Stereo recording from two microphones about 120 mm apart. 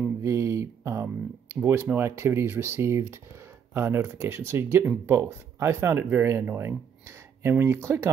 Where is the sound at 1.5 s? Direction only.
20° right (ahead or behind).